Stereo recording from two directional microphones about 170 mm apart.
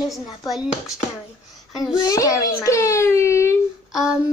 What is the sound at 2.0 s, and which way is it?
A child's voice, 20° left (ahead or behind).